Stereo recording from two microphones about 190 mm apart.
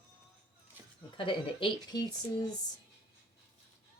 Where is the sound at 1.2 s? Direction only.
25° left (ahead or behind).